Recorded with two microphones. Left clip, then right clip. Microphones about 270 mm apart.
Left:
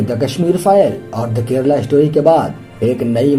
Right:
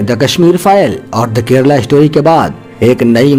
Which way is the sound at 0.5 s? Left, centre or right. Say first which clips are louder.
Left 1 dB; right.